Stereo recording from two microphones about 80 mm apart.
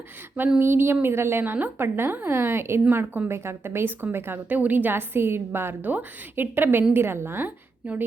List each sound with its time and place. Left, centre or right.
0.6 s a woman's voice: right